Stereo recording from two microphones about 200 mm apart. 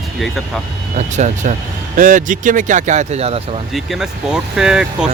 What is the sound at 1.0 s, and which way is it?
Speech, 35° right (ahead or behind).